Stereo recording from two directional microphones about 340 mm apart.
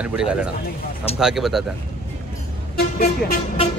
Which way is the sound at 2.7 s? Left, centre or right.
Left.